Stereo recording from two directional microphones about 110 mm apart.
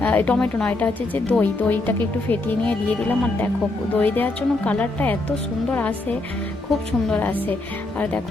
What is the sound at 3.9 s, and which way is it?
A woman's voice, 15° left (ahead or behind).